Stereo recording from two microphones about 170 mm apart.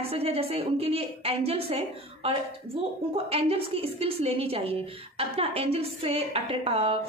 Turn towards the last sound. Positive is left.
turn(degrees=-35)  # may be behind; listen again after turning